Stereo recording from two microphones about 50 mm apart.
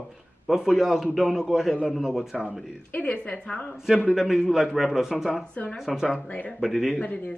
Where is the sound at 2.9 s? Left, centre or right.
Left.